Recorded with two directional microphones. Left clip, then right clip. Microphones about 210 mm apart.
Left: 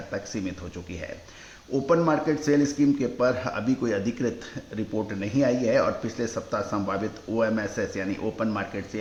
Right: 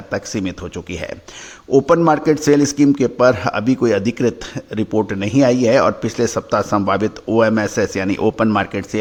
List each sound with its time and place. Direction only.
0.1 s a man's voice: 50° right (ahead or behind)